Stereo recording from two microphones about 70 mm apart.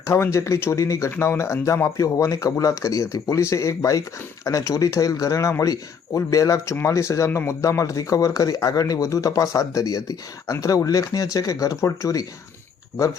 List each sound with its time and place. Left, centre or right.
0.1 s speech: left